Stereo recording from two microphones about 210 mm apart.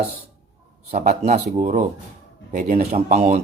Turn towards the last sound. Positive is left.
turn(degrees=-30)  # may be behind; listen again after turning